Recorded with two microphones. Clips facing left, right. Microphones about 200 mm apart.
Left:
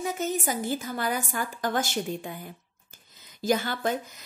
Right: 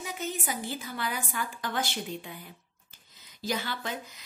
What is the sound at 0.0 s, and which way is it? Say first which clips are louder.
A woman's voice: left 7 dB; 45° left (ahead or behind).